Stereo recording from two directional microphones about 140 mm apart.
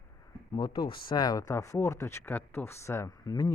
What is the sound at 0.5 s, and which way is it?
Speech, 30° left (ahead or behind).